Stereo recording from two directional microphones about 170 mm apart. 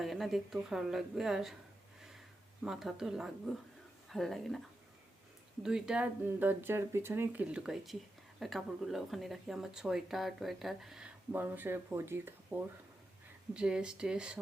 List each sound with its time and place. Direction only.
0.0 s speech: centre (ahead or behind)
2.6 s speech: centre (ahead or behind)
5.6 s speech: 5° right (ahead or behind)